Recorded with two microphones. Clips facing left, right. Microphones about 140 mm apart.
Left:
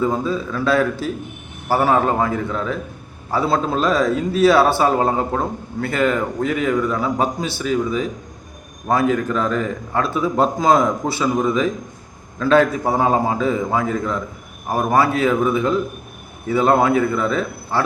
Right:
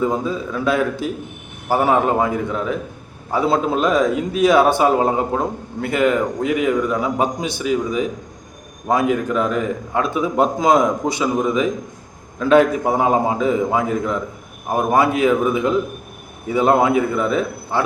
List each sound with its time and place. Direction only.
0.0 s a man's voice: 15° right (ahead or behind)